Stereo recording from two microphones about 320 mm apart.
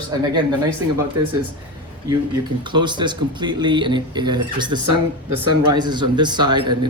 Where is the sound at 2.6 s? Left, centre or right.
Centre.